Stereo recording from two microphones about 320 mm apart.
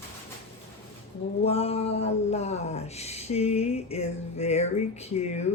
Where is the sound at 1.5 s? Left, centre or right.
Centre.